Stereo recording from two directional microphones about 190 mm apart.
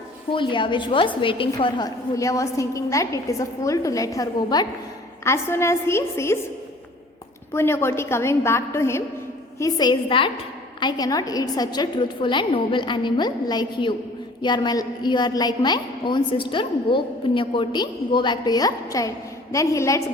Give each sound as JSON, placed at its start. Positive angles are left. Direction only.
{"t": 0.3, "sound": "a woman's voice", "side_deg": 25}
{"t": 7.5, "sound": "a woman's voice", "side_deg": 15}